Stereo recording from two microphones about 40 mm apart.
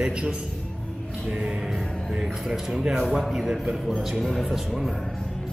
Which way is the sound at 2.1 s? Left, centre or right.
Centre.